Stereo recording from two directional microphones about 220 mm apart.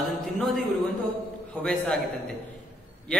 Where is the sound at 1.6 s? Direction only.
5° left (ahead or behind).